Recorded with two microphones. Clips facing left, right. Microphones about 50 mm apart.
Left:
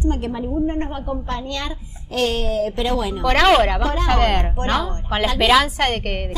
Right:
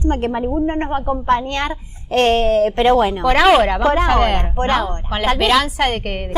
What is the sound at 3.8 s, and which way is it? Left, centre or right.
Speech, right.